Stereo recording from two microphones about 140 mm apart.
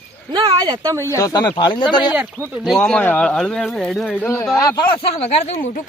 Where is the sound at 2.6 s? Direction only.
5° left (ahead or behind); by 4.8 s 25° left (ahead or behind).